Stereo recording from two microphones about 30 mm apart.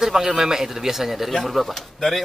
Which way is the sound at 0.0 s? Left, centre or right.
Centre.